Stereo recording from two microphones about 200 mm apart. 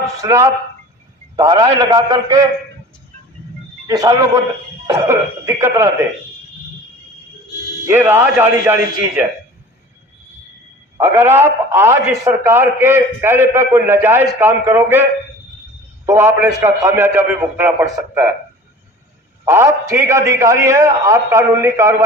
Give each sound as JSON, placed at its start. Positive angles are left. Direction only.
{"t": 0.2, "sound": "a man's voice", "side_deg": -15}
{"t": 3.8, "sound": "a man's voice", "side_deg": -20}
{"t": 7.9, "sound": "a man's voice", "side_deg": -10}
{"t": 10.9, "sound": "a man's voice", "side_deg": -15}
{"t": 16.0, "sound": "a man's voice", "side_deg": -10}
{"t": 19.5, "sound": "a man's voice", "side_deg": -15}